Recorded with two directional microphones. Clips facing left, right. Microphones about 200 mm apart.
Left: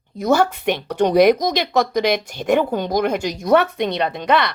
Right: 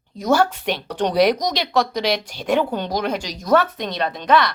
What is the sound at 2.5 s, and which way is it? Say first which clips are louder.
Speech: left 1 dB; 10° left (ahead or behind).